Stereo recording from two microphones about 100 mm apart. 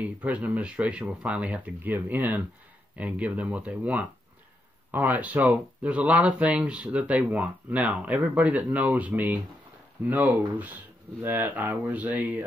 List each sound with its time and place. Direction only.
0.0 s speech: 15° right (ahead or behind)